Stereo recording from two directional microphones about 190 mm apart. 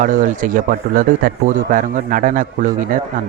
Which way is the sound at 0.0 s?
45° right (ahead or behind).